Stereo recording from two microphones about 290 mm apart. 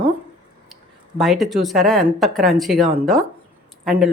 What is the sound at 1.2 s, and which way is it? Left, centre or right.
Speech, centre.